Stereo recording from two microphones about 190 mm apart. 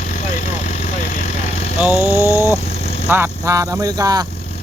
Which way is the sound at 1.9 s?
15° left (ahead or behind).